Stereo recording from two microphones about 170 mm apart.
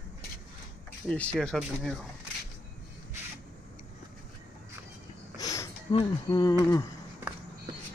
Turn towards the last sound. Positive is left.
turn(degrees=25)  # may be behind; listen again after turning